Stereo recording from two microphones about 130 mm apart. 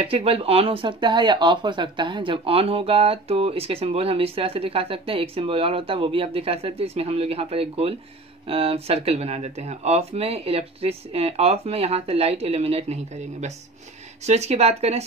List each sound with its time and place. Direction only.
0.0 s speech: 45° right (ahead or behind)